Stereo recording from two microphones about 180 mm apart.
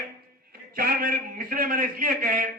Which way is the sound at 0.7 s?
55° right (ahead or behind).